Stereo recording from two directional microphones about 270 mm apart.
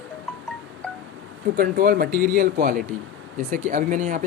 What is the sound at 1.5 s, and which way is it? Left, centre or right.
Speech, right.